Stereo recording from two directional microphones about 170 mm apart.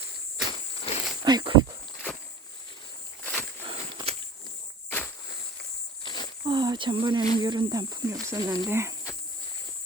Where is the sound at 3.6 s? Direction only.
30° right (ahead or behind).